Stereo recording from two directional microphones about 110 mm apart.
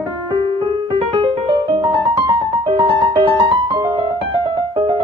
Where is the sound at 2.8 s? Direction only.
50° right (ahead or behind).